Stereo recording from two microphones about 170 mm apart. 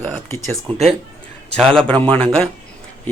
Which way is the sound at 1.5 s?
5° left (ahead or behind).